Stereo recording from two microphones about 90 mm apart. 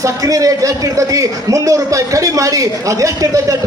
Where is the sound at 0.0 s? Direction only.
40° right (ahead or behind).